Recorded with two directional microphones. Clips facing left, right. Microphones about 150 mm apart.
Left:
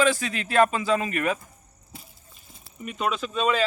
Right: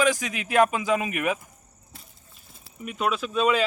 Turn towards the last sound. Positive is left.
turn(degrees=-5)  # may be behind; listen again after turning